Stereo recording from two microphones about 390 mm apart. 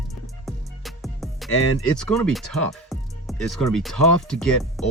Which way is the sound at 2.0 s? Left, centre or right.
Centre.